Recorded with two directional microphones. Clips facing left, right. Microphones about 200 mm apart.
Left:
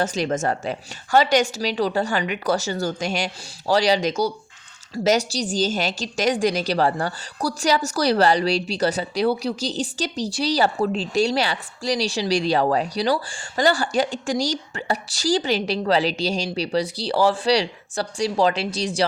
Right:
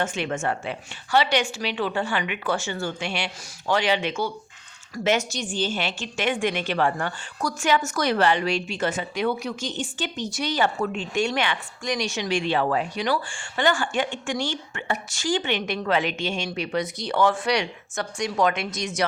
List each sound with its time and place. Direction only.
0.0 s a woman's voice: 35° left (ahead or behind)